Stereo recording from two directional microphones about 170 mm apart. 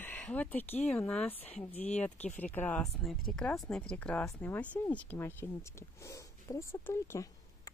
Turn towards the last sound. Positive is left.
turn(degrees=15)  # may be behind; listen again after turning